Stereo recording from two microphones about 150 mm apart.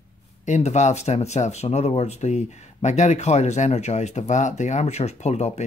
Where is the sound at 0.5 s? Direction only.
50° left (ahead or behind).